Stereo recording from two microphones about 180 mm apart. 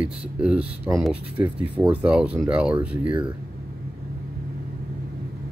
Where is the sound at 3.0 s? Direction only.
25° right (ahead or behind).